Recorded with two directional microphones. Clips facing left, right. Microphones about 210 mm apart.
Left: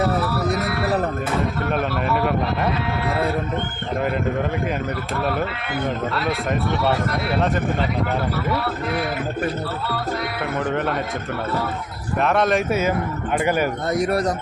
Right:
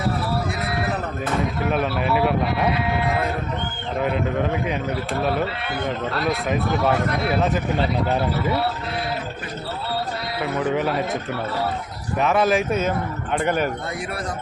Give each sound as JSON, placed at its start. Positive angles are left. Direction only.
{"t": 1.7, "sound": "speech", "side_deg": -5}
{"t": 7.3, "sound": "speech", "side_deg": 0}
{"t": 10.6, "sound": "speech", "side_deg": 0}
{"t": 12.2, "sound": "speech", "side_deg": -5}
{"t": 13.4, "sound": "speech", "side_deg": 5}
{"t": 13.9, "sound": "a man's voice", "side_deg": 40}